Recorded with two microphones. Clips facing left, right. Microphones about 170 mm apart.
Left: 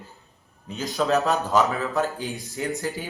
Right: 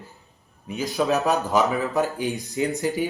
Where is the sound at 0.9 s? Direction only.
15° right (ahead or behind).